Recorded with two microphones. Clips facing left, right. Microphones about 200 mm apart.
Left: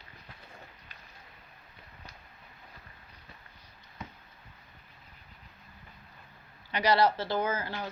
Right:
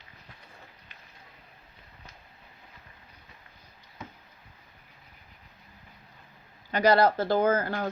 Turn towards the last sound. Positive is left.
turn(degrees=-50)  # may be behind; listen again after turning